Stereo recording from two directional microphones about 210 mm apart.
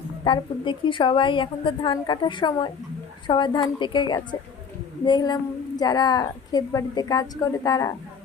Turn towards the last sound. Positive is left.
turn(degrees=15)  # may be behind; listen again after turning